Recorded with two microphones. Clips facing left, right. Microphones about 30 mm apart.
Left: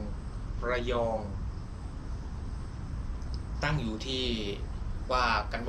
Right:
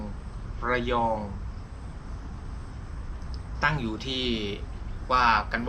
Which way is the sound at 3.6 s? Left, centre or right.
Centre.